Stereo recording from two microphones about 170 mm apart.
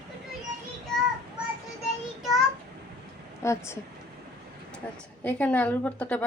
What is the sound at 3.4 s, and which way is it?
Speech, 15° left (ahead or behind).